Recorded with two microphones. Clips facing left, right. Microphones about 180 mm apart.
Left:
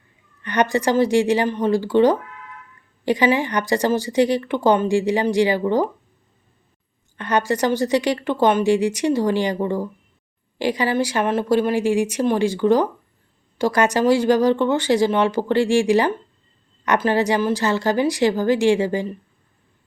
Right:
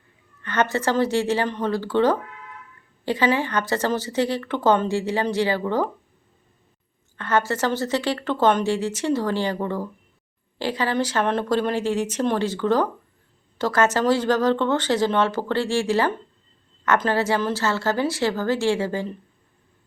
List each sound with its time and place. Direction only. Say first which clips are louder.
0.4 s speech: left 3 dB; 15° left (ahead or behind)
7.2 s speech: left 2 dB; 15° left (ahead or behind)